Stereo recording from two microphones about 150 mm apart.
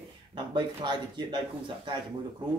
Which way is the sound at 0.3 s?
30° right (ahead or behind).